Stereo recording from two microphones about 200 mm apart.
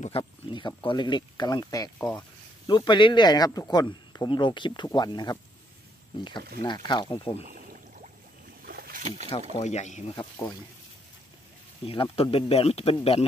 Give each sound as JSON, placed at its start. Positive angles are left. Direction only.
{"t": 0.2, "sound": "speech", "side_deg": 20}
{"t": 2.0, "sound": "speech", "side_deg": 5}
{"t": 2.6, "sound": "speech", "side_deg": 25}
{"t": 6.6, "sound": "speech", "side_deg": 20}
{"t": 7.4, "sound": "rowboat", "side_deg": -40}
{"t": 8.6, "sound": "boat", "side_deg": -50}
{"t": 9.6, "sound": "speech", "side_deg": 35}
{"t": 11.8, "sound": "speech", "side_deg": 25}